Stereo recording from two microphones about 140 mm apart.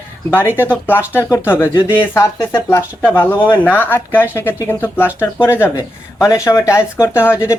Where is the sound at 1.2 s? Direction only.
20° left (ahead or behind).